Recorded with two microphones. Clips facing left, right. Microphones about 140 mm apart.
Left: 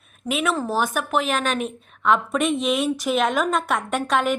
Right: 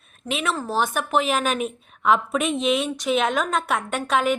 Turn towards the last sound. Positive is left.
turn(degrees=0)  # may be behind; listen again after turning